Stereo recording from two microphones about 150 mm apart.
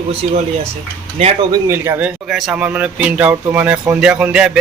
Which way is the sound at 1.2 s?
40° right (ahead or behind).